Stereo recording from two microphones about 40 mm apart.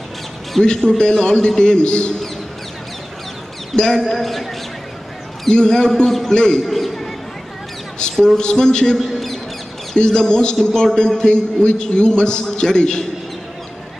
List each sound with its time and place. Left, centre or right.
0.7 s a man's voice: centre
3.7 s a man's voice: centre
5.5 s a man's voice: centre
6.6 s a sound: centre
8.4 s a man's voice: centre
8.9 s mouse: centre
9.9 s a man's voice: centre